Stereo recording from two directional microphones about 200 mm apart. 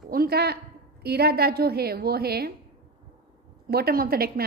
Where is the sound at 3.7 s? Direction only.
50° right (ahead or behind).